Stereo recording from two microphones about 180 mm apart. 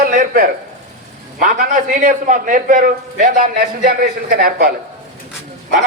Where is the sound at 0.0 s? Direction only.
50° right (ahead or behind).